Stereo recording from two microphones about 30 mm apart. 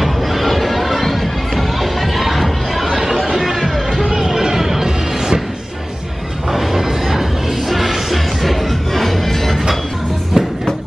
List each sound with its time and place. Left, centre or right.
0.0 s music: centre
1.8 s chatter: centre
3.3 s music: centre
4.2 s a sound: centre
4.6 s music: centre
6.5 s music: centre
10.4 s music: right